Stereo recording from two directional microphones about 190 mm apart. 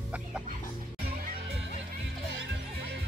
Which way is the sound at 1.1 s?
50° right (ahead or behind).